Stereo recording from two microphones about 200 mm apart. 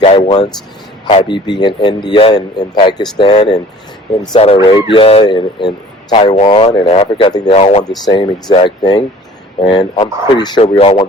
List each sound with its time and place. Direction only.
0.0 s a man's voice: 25° left (ahead or behind)
8.0 s speech: 20° left (ahead or behind)